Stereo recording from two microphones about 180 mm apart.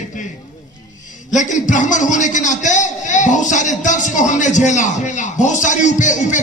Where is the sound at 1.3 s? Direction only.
45° left (ahead or behind).